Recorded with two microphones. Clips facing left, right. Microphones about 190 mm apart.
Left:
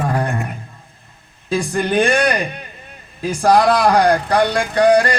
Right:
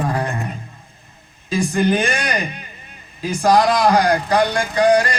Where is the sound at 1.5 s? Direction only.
65° left (ahead or behind).